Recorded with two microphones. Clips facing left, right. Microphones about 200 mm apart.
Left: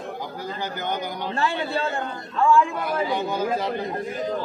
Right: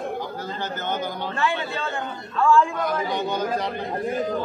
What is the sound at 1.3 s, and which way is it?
Speech, 35° left (ahead or behind).